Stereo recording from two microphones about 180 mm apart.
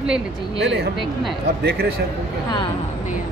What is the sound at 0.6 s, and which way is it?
A man's voice, 70° right (ahead or behind).